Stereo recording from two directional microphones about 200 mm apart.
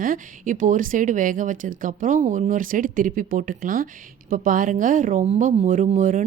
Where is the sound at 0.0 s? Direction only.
40° right (ahead or behind).